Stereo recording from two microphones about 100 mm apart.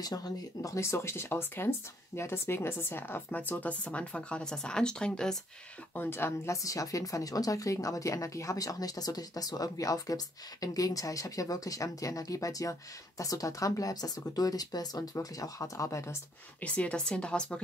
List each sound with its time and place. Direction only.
0.0 s a woman's voice: 40° left (ahead or behind)
0.6 s speech: 30° left (ahead or behind); by 5.4 s 10° left (ahead or behind)
5.9 s a woman's voice: 25° left (ahead or behind)
16.6 s speech: 10° left (ahead or behind)